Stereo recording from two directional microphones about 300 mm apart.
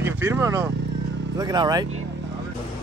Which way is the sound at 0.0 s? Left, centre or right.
Centre.